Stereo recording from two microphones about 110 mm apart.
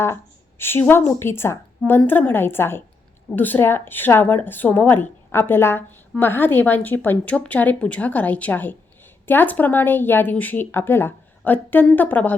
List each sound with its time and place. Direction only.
0.6 s a woman's voice: 20° left (ahead or behind)